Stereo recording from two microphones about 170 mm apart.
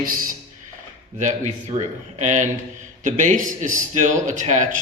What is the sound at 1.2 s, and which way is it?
Speech, 45° right (ahead or behind).